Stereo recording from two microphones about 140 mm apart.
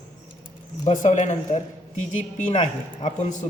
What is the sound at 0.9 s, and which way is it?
A man's voice, 60° left (ahead or behind).